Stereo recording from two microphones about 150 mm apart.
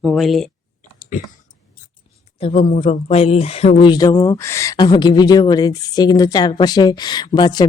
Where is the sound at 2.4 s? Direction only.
45° left (ahead or behind).